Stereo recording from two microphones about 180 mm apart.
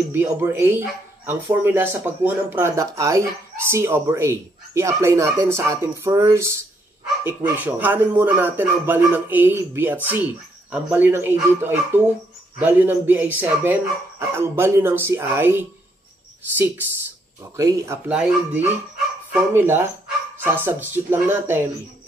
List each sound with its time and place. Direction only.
0.1 s speech: 10° right (ahead or behind)